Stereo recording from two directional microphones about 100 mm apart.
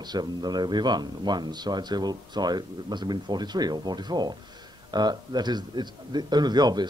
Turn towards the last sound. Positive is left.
turn(degrees=-45)  # may be behind; listen again after turning